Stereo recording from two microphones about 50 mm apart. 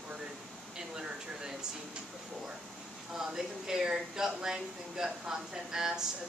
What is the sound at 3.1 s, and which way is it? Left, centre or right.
Speech, centre.